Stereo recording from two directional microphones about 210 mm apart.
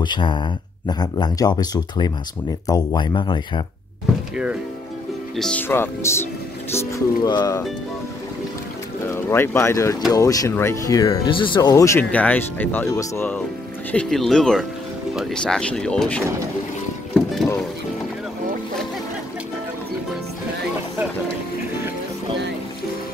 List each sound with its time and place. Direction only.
0.0 s speech: 20° left (ahead or behind)
5.3 s speech: 5° left (ahead or behind); by 7.6 s 20° left (ahead or behind)
9.0 s speech: 10° left (ahead or behind)
17.1 s music: centre (ahead or behind)